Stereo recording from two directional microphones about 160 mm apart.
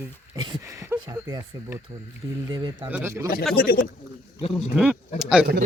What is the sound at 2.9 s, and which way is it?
Speech, 10° right (ahead or behind).